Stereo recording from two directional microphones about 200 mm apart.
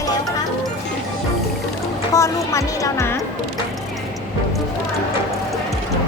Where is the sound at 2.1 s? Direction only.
15° left (ahead or behind).